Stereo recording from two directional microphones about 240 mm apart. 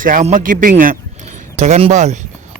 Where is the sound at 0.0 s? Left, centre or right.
Right.